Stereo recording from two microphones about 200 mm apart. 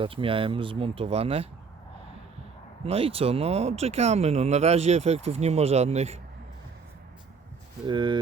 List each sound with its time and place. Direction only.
0.0 s speech: 25° right (ahead or behind)
2.8 s speech: 30° right (ahead or behind)
7.9 s speech: 25° right (ahead or behind)